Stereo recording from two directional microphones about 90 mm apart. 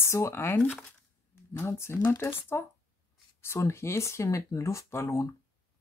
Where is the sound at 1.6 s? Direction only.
30° left (ahead or behind).